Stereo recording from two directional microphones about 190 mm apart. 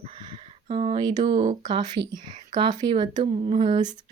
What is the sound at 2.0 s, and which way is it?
Speech, 65° right (ahead or behind).